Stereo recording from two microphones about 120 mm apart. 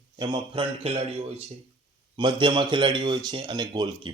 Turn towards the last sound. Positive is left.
turn(degrees=-35)  # may be behind; listen again after turning